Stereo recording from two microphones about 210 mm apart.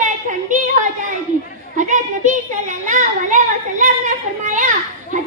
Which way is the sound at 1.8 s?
35° right (ahead or behind).